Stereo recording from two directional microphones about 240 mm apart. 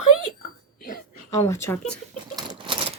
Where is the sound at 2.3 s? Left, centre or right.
Centre.